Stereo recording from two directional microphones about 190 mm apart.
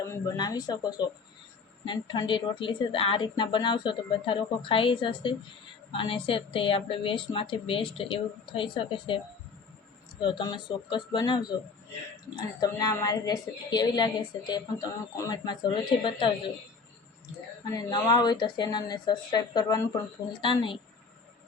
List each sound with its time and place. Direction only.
0.0 s a woman's voice: 15° left (ahead or behind)
12.5 s a woman's voice: 20° left (ahead or behind)
17.7 s a woman's voice: 20° left (ahead or behind)